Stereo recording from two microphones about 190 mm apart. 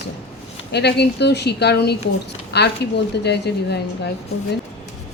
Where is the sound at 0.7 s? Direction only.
60° left (ahead or behind).